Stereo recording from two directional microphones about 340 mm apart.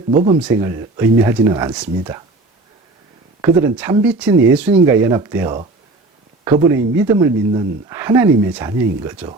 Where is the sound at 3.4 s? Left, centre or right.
Centre.